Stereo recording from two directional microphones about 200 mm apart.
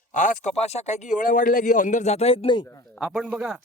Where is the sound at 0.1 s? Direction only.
40° left (ahead or behind).